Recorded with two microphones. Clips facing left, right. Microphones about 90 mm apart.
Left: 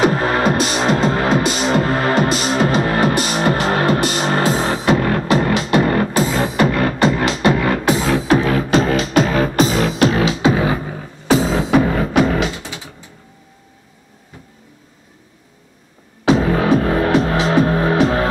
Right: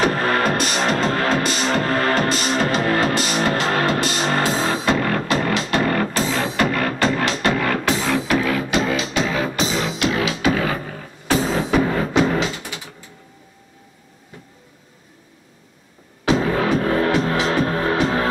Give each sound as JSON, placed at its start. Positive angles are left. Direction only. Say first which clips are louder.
{"t": 0.0, "sound": "music", "louder": "left 3 dB", "side_deg": 10}
{"t": 10.4, "sound": "beatboxing", "louder": "left 4 dB", "side_deg": 20}
{"t": 16.3, "sound": "music", "louder": "left 4 dB", "side_deg": 20}